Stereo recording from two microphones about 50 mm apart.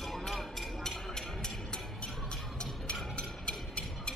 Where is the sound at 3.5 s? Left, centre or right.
Centre.